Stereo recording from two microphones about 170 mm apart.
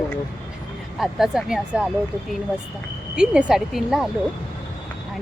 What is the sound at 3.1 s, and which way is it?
Speech, 5° right (ahead or behind).